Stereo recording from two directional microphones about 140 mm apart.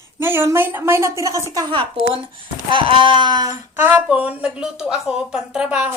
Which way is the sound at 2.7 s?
35° right (ahead or behind).